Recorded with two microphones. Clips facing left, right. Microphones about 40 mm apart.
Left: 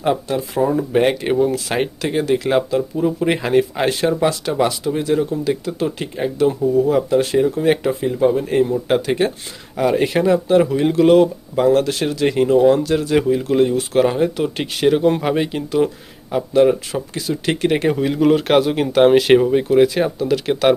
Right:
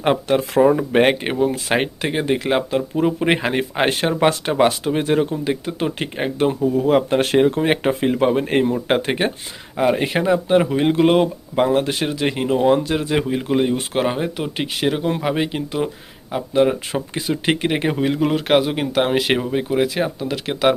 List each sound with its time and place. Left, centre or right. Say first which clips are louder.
0.0 s speech: right 2 dB; right
1.2 s speech: left 3 dB; right
5.3 s speech: left 2 dB; right
6.8 s speech: even; right
7.6 s speech: left 1 dB; right
8.0 s speech: left 2 dB; right
8.6 s speech: left 1 dB; right
9.7 s speech: left 2 dB; centre
15.4 s speech: left 4 dB; centre
16.9 s speech: even; right
17.7 s speech: left 2 dB; centre